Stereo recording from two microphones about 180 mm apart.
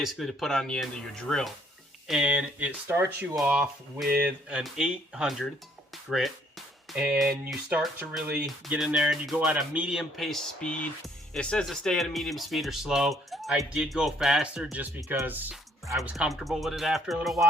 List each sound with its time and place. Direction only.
0.0 s speech: centre (ahead or behind)